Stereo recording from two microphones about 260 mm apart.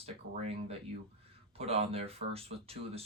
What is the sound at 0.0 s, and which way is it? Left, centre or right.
Speech, right.